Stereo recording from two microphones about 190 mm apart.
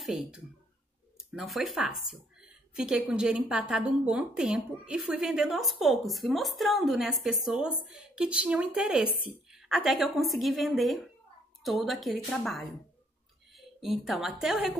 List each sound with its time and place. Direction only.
0.0 s a woman's voice: 5° right (ahead or behind)